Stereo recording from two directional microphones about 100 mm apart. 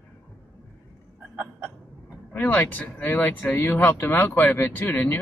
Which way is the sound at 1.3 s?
15° right (ahead or behind).